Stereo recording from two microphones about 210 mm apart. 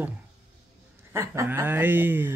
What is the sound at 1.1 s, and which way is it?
Speech, 15° right (ahead or behind).